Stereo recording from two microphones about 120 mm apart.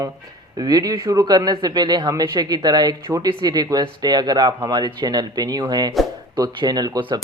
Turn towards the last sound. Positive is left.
turn(degrees=-35)  # may be behind; listen again after turning